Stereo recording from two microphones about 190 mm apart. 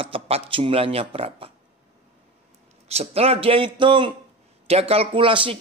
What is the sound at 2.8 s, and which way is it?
Speech, 35° right (ahead or behind).